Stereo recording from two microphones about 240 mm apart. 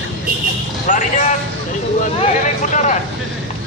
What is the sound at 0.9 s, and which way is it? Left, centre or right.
Speech, left.